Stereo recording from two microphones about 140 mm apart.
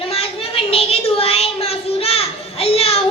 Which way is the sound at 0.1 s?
45° left (ahead or behind).